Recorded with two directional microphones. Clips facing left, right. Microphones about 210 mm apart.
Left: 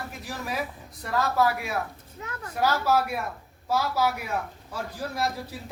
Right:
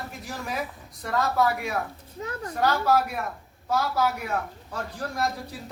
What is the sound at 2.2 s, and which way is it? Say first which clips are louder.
Speech: right 5 dB; 35° right (ahead or behind).